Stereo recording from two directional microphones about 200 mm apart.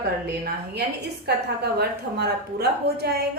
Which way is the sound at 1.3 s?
55° right (ahead or behind).